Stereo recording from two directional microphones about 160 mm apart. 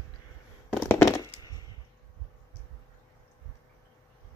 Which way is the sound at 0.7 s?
10° left (ahead or behind).